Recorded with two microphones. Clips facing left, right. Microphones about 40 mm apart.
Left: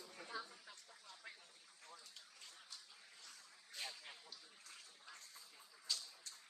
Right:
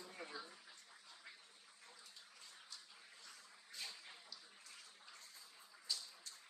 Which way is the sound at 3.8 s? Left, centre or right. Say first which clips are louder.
Left 2 dB; left.